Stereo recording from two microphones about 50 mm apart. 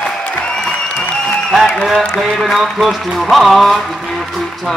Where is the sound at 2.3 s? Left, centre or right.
Centre.